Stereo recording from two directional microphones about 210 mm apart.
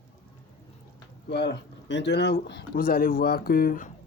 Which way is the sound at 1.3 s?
55° left (ahead or behind).